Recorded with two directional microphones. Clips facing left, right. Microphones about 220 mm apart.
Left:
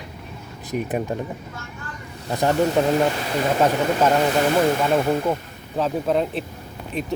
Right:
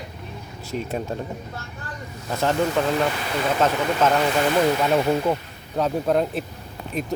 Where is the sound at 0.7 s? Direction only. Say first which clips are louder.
Left 3 dB; 15° left (ahead or behind).